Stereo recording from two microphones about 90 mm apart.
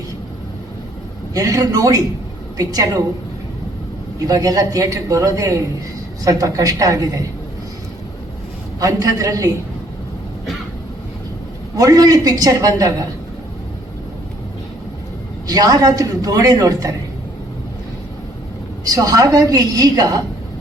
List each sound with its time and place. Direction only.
1.3 s a man's voice: 40° right (ahead or behind)
4.3 s a man's voice: 45° right (ahead or behind)
8.8 s a man's voice: 40° right (ahead or behind)
11.8 s a man's voice: 45° right (ahead or behind)
15.4 s a man's voice: 45° right (ahead or behind)
18.9 s a man's voice: 40° right (ahead or behind)